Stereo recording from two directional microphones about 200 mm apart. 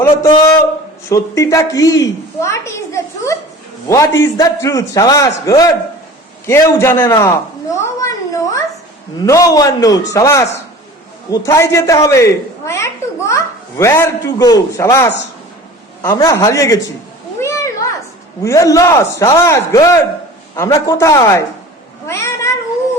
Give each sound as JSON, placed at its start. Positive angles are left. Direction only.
{"t": 0.0, "sound": "a woman's voice", "side_deg": 15}
{"t": 8.0, "sound": "a sound", "side_deg": 15}
{"t": 9.2, "sound": "a woman's voice", "side_deg": 15}
{"t": 17.4, "sound": "a sound", "side_deg": 15}
{"t": 18.4, "sound": "a woman's voice", "side_deg": 15}
{"t": 22.0, "sound": "cat", "side_deg": 15}